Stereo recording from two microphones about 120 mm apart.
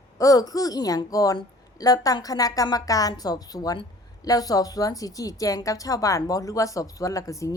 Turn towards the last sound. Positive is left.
turn(degrees=25)  # may be behind; listen again after turning